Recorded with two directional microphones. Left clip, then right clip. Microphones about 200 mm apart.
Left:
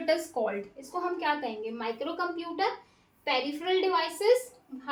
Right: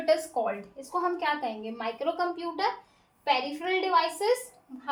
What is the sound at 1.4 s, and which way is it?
Speech, 35° right (ahead or behind).